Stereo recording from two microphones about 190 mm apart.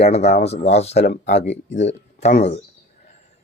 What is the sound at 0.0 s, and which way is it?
A man's voice, 35° left (ahead or behind).